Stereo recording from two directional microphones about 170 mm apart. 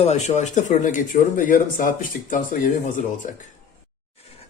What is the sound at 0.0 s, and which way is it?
Speech, 40° left (ahead or behind).